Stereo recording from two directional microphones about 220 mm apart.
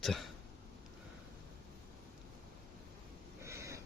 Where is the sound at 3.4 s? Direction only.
15° right (ahead or behind).